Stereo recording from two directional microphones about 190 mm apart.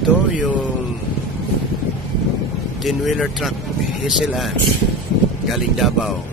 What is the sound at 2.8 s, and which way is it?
Speech, centre (ahead or behind).